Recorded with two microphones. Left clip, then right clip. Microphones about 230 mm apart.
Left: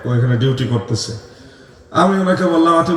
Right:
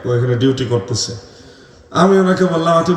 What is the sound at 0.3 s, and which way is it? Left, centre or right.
A man's voice, right.